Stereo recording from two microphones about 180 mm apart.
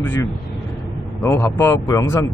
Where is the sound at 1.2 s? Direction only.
10° left (ahead or behind).